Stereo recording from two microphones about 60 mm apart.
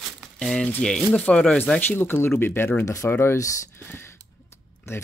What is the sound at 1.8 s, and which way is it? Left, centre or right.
Speech, left.